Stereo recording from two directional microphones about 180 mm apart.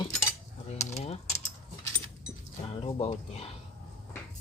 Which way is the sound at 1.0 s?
35° left (ahead or behind).